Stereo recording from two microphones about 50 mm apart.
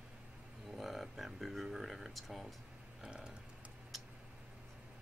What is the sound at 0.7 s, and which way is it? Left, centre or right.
Speech, centre.